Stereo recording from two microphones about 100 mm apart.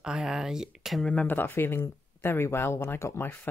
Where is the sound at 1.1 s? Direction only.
15° left (ahead or behind).